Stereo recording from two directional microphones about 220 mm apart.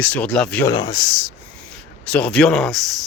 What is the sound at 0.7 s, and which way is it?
Speech, 20° left (ahead or behind).